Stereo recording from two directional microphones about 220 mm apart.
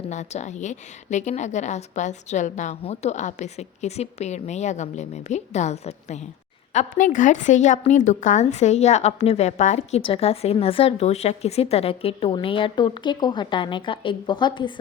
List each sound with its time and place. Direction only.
0.1 s a woman's voice: 30° left (ahead or behind)